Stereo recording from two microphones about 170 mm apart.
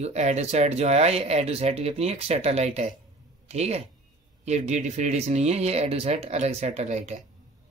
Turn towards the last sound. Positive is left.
turn(degrees=-40)  # may be behind; listen again after turning